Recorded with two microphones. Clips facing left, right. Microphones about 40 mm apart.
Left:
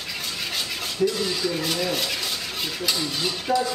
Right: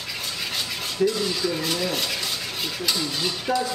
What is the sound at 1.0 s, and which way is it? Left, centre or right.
Speech, centre.